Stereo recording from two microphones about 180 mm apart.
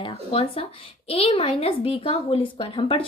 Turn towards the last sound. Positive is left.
turn(degrees=30)  # may be behind; listen again after turning